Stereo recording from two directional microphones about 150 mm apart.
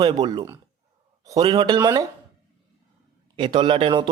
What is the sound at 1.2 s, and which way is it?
Speech, 25° right (ahead or behind).